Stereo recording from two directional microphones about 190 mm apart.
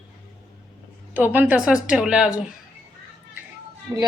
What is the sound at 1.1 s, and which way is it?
A woman's voice, 10° right (ahead or behind).